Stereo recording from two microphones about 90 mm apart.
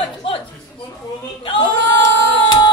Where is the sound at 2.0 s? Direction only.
50° left (ahead or behind).